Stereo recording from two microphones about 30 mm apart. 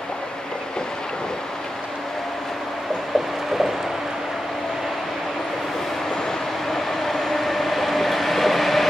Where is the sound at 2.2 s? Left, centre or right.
Centre.